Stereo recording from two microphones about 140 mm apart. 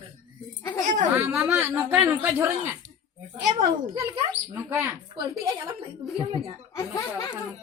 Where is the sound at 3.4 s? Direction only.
55° right (ahead or behind).